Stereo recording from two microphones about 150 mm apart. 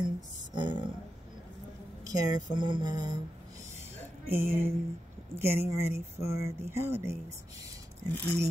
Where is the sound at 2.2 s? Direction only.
25° right (ahead or behind).